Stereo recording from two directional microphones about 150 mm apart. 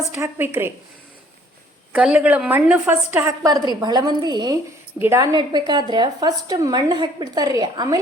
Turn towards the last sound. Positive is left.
turn(degrees=-25)  # may be behind; listen again after turning